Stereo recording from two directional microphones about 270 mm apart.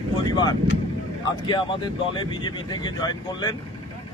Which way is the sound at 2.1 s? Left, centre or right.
Centre.